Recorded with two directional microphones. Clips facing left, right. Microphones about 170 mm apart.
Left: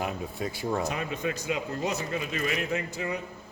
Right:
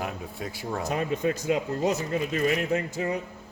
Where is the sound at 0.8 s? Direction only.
40° right (ahead or behind).